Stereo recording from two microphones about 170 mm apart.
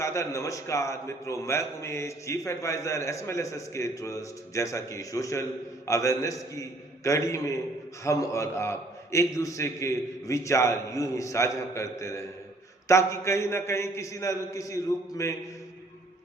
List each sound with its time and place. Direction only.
0.0 s a man's voice: 15° left (ahead or behind)